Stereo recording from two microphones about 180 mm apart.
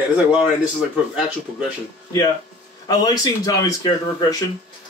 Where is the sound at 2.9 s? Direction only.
20° left (ahead or behind).